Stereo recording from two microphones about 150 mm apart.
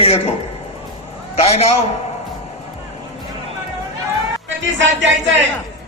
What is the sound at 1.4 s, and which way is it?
Speech, 45° left (ahead or behind).